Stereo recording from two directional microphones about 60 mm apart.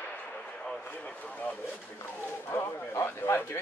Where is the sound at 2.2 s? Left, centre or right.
Left.